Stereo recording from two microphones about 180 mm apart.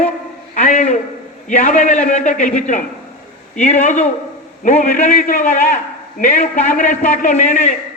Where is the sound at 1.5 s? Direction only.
45° left (ahead or behind).